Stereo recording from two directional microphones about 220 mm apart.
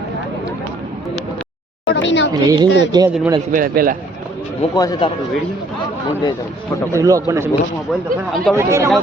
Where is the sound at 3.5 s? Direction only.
40° right (ahead or behind).